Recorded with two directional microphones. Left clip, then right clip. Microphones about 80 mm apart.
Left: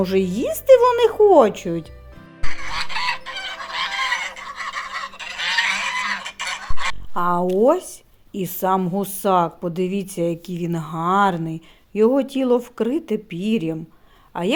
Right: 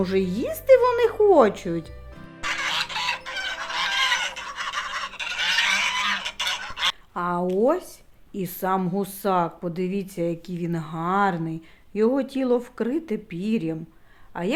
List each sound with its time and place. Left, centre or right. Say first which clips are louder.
0.0 s speech: left 4 dB; left
2.4 s fowl: right 3 dB; centre
7.2 s speech: left 6 dB; left
14.3 s speech: left 5 dB; left